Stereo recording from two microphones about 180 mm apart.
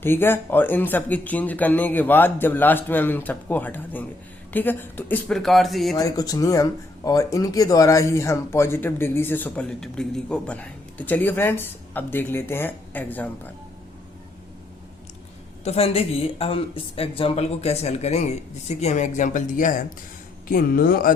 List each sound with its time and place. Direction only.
0.0 s speech: 10° left (ahead or behind)
6.0 s speech: 20° left (ahead or behind)
15.6 s speech: 35° left (ahead or behind); by 21.1 s 55° left (ahead or behind)